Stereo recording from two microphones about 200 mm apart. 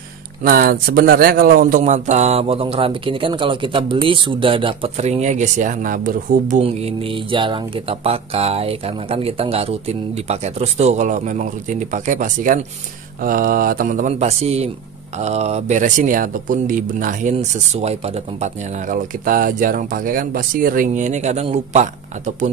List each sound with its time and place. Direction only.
0.4 s speech: 50° right (ahead or behind)
6.6 s speech: 30° right (ahead or behind)